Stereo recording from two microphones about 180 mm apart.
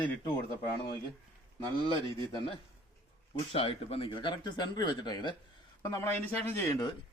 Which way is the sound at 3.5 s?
30° left (ahead or behind).